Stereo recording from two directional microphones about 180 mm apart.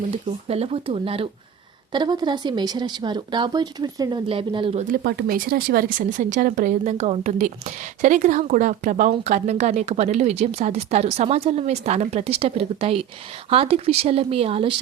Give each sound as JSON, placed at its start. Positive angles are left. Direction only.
{"t": 0.4, "sound": "a woman's voice", "side_deg": -35}
{"t": 5.0, "sound": "a woman's voice", "side_deg": -65}